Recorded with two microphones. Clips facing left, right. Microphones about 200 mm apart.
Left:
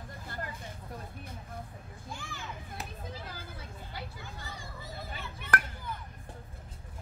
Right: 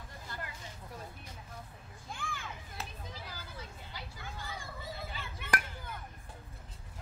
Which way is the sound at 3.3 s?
55° left (ahead or behind).